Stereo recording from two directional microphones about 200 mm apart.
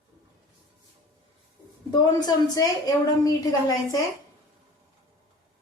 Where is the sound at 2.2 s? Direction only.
20° left (ahead or behind).